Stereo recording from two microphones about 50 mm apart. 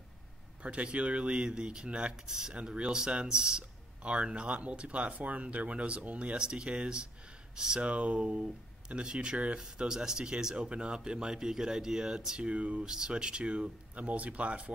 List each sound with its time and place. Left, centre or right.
0.6 s speech: right
2.2 s speech: centre
7.8 s speech: right
12.8 s speech: centre